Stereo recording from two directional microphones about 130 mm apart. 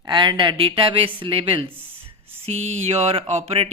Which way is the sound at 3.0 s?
55° right (ahead or behind).